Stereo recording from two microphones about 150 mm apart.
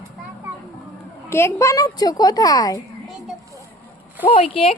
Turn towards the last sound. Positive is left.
turn(degrees=40)  # may be behind; listen again after turning